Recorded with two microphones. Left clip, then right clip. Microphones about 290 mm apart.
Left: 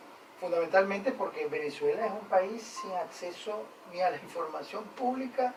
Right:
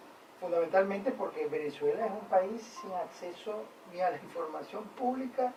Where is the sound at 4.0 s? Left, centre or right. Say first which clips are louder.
Left 2 dB; centre.